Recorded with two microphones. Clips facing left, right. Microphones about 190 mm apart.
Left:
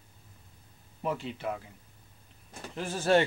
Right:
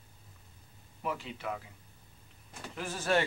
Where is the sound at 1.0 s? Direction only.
30° left (ahead or behind).